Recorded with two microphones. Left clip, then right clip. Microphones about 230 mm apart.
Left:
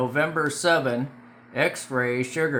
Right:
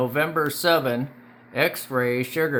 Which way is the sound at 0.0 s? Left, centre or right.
Centre.